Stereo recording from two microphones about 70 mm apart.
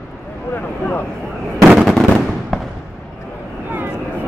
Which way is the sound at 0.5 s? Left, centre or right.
Left.